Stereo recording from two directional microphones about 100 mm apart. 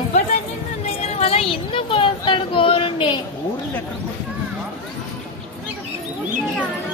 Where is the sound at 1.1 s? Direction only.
75° left (ahead or behind); by 3.2 s 60° left (ahead or behind).